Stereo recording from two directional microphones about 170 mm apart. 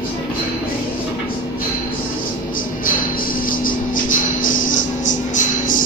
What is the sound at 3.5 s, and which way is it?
Music, 55° left (ahead or behind).